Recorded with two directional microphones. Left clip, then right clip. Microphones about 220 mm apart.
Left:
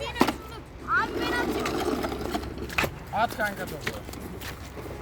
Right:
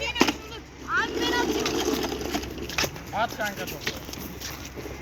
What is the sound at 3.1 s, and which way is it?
Speech, 50° left (ahead or behind).